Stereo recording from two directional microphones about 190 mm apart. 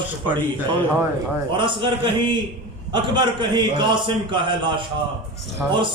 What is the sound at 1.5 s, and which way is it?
A man's voice, 25° right (ahead or behind).